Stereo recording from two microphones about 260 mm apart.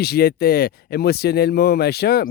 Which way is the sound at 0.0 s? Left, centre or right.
Left.